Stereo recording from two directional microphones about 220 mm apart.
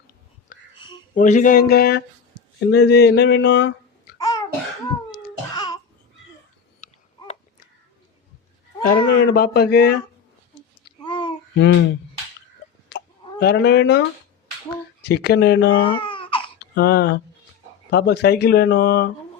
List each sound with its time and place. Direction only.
1.1 s speech: 35° left (ahead or behind); by 4.1 s 50° left (ahead or behind)
4.2 s cough: 15° left (ahead or behind)
5.5 s babbling: 15° left (ahead or behind)
8.9 s speech: 45° left (ahead or behind)
11.0 s babbling: 20° left (ahead or behind)
11.5 s a sound: 55° left (ahead or behind)
12.9 s a sound: 50° left (ahead or behind)
13.4 s speech: 50° left (ahead or behind)
15.0 s speech: 50° left (ahead or behind)
15.7 s a sound: 20° left (ahead or behind)
16.6 s speech: 45° left (ahead or behind)